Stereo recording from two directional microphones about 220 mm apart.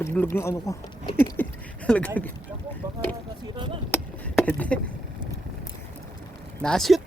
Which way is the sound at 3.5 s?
20° right (ahead or behind).